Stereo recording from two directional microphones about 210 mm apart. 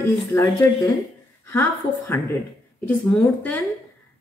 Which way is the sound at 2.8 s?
10° left (ahead or behind).